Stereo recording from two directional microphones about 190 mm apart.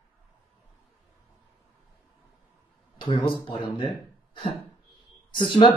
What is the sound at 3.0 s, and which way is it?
Speech, 25° left (ahead or behind).